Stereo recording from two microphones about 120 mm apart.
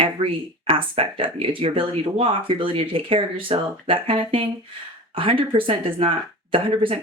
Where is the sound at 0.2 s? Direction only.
45° right (ahead or behind).